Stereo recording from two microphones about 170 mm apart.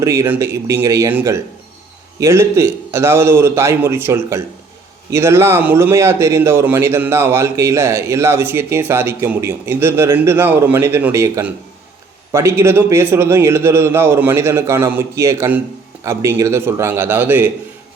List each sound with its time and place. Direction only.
0.0 s a man's voice: 15° right (ahead or behind)